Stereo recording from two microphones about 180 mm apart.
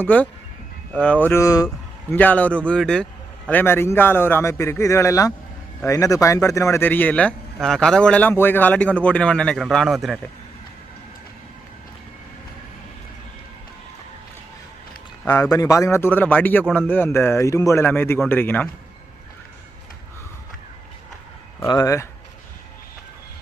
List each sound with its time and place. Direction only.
0.0 s a man's voice: 10° left (ahead or behind)
15.2 s a man's voice: 15° left (ahead or behind)
21.7 s a man's voice: 20° left (ahead or behind)